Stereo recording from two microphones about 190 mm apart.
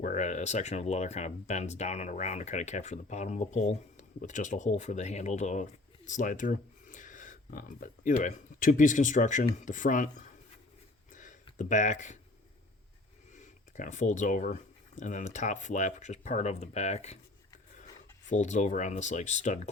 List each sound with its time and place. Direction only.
0.0 s speech: 40° left (ahead or behind)
11.1 s a sound: 40° left (ahead or behind)
11.5 s speech: 40° left (ahead or behind)
13.3 s speech: 40° left (ahead or behind)
18.3 s speech: 40° left (ahead or behind)